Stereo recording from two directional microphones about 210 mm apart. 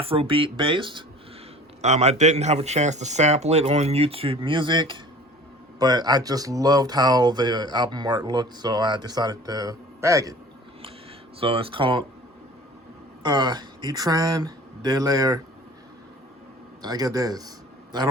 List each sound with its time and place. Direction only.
0.0 s speech: 25° right (ahead or behind)
11.3 s speech: 25° right (ahead or behind)
13.2 s speech: 20° right (ahead or behind)
16.8 s speech: 20° right (ahead or behind)